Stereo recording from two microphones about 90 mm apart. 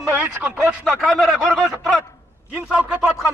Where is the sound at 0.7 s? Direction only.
5° right (ahead or behind).